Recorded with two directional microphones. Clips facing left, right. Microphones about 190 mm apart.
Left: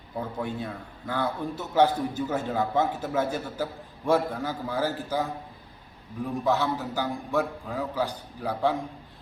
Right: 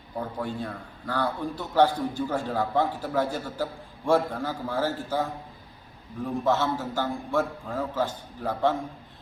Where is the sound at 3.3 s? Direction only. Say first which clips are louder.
Even; 15° left (ahead or behind).